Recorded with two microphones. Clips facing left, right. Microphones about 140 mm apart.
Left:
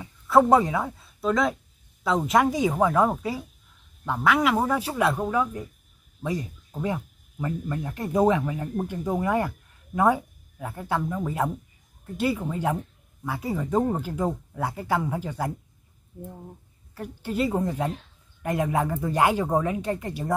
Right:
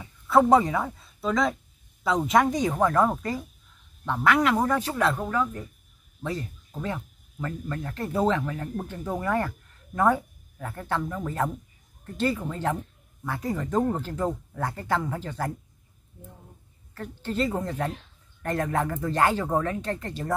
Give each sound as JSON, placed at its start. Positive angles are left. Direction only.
{"t": 0.0, "sound": "a woman's voice", "side_deg": 0}
{"t": 16.9, "sound": "speech", "side_deg": 10}